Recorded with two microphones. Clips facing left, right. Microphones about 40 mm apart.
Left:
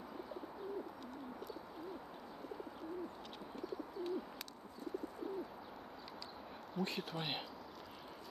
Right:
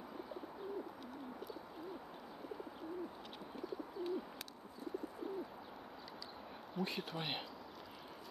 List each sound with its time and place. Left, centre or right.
3.6 s bird: centre
6.7 s speech: centre